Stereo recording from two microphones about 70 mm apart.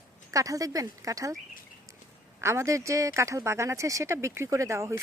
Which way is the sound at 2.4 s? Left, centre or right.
Right.